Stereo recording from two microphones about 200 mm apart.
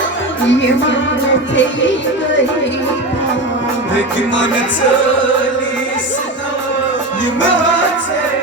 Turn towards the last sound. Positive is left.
turn(degrees=70)  # may be behind; listen again after turning